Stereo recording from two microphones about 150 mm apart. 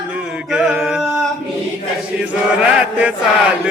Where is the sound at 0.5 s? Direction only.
5° right (ahead or behind).